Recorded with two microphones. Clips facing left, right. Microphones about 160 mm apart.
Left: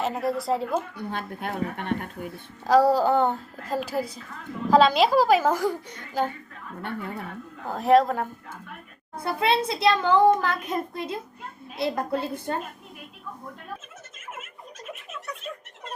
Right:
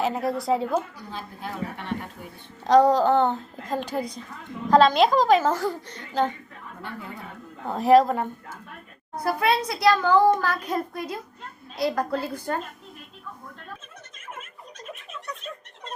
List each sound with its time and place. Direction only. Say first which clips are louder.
0.0 s a woman's voice: right 1 dB; centre (ahead or behind)
0.9 s a woman's voice: left 5 dB; 60° left (ahead or behind)
2.6 s a child's voice: right 2 dB; 5° left (ahead or behind)
7.7 s a woman's voice: right 2 dB; centre (ahead or behind)
9.1 s a child's voice: right 1 dB; 25° left (ahead or behind)